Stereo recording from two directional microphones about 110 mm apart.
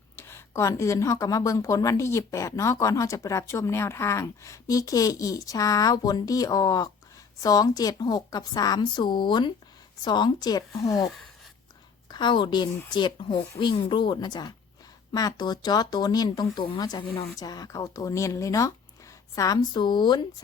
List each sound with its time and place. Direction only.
0.2 s speech: 20° left (ahead or behind); by 10.9 s 40° left (ahead or behind)
12.0 s speech: 40° left (ahead or behind)